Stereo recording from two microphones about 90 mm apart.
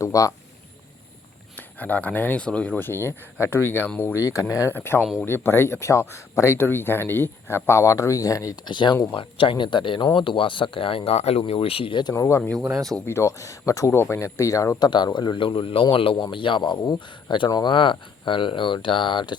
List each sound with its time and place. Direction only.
0.0 s speech: 40° left (ahead or behind)
1.5 s speech: 20° left (ahead or behind); by 4.7 s 40° left (ahead or behind)
4.7 s speech: 25° left (ahead or behind)
8.6 s speech: 60° left (ahead or behind)
9.1 s speech: 75° left (ahead or behind)
12.0 s speech: 40° left (ahead or behind)
12.4 s speech: 10° left (ahead or behind)
13.1 s speech: 35° left (ahead or behind)
14.8 s speech: 55° left (ahead or behind); by 16.1 s 80° left
16.1 s speech: 60° left (ahead or behind)
16.8 s speech: 45° left (ahead or behind)